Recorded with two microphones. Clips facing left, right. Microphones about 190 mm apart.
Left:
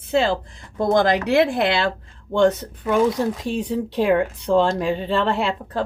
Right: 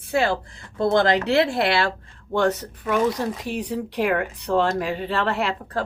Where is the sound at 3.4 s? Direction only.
25° left (ahead or behind).